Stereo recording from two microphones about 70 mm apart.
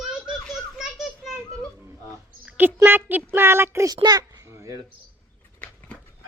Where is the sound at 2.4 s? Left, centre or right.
Right.